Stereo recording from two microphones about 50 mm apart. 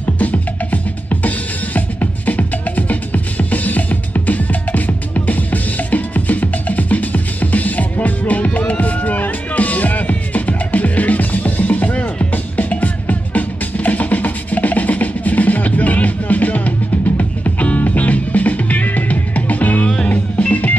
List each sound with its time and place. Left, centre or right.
0.0 s music: left